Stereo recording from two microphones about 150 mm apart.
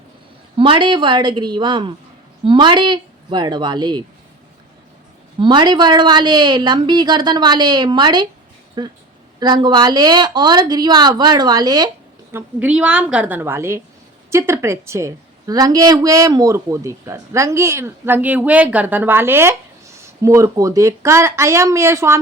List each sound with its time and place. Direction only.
0.6 s speech: 35° right (ahead or behind)
5.4 s a woman's voice: 30° right (ahead or behind)
12.3 s a woman's voice: 15° right (ahead or behind)